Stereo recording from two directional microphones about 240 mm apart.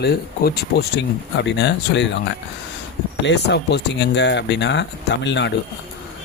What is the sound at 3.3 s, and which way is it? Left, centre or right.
Speech, left.